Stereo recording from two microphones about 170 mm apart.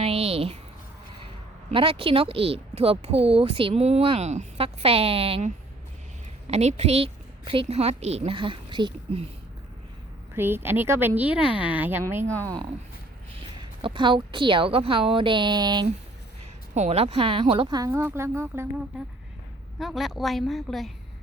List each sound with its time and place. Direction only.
0.0 s a sound: 35° right (ahead or behind)
1.7 s a woman's voice: 30° right (ahead or behind)
6.5 s a woman's voice: 40° right (ahead or behind)
10.3 s speech: 15° right (ahead or behind)
13.6 s a woman's voice: 30° right (ahead or behind)
16.7 s a woman's voice: 40° right (ahead or behind); by 18.7 s 15° right (ahead or behind)
19.8 s a woman's voice: centre (ahead or behind)